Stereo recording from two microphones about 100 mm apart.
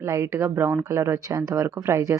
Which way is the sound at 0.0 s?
30° right (ahead or behind).